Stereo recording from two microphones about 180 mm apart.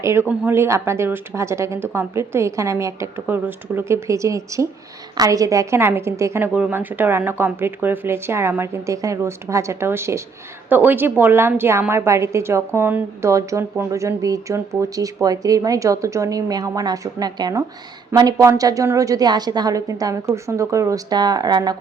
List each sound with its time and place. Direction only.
0.0 s a woman's voice: 15° right (ahead or behind)